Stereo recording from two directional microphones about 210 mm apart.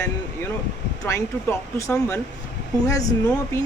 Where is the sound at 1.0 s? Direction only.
10° left (ahead or behind).